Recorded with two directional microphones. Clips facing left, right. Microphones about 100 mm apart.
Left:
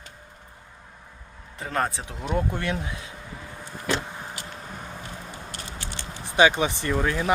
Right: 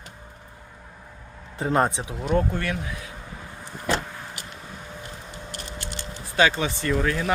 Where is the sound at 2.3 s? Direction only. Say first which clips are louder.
Right 2 dB; 20° left (ahead or behind).